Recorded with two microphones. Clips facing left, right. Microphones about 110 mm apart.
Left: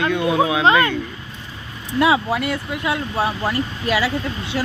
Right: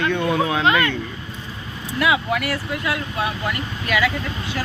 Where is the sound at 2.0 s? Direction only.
30° left (ahead or behind).